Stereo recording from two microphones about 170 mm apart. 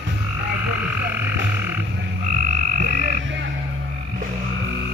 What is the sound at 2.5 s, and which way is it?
Frog, 50° right (ahead or behind).